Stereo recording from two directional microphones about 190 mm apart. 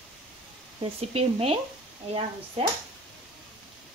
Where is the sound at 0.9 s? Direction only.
30° right (ahead or behind).